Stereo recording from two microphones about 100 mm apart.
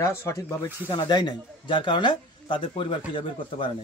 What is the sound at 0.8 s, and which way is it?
Speech, 50° left (ahead or behind).